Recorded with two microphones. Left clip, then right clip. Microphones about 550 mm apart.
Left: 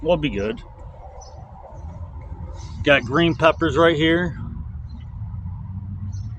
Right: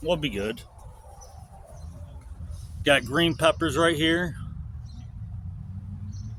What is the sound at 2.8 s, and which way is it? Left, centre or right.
Speech, right.